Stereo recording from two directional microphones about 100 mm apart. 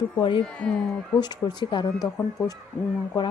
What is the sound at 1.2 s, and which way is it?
Speech, 45° left (ahead or behind).